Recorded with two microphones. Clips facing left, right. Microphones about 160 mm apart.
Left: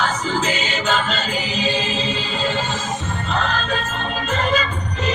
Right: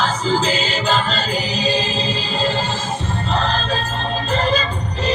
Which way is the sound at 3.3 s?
35° right (ahead or behind).